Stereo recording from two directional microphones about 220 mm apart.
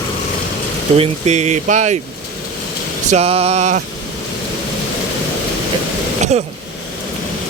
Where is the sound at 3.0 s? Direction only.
30° right (ahead or behind).